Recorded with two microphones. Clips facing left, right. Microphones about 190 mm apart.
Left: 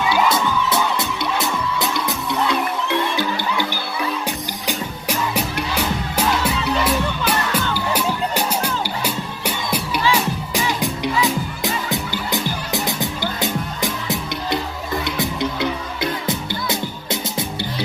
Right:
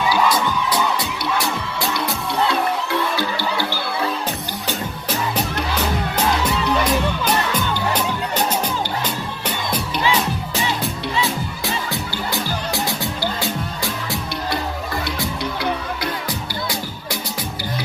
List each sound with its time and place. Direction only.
0.1 s music: 25° left (ahead or behind)
5.0 s music: 10° left (ahead or behind)